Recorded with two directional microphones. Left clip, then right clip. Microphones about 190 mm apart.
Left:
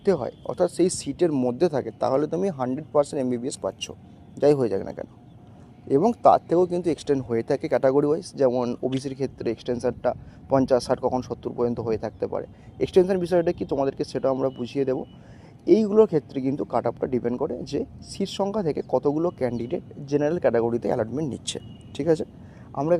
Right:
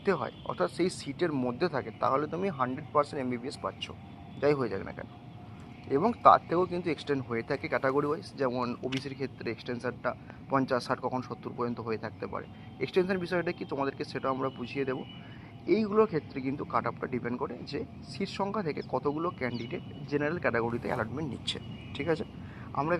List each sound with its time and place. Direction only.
0.0 s speech: 90° left
6.2 s speech: 90° left